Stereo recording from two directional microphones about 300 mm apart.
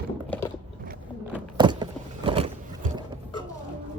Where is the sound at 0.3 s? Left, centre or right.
Centre.